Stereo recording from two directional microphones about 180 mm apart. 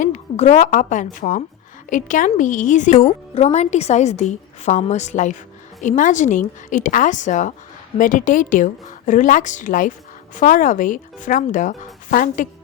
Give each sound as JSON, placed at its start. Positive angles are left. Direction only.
{"t": 0.0, "sound": "a woman's voice", "side_deg": 40}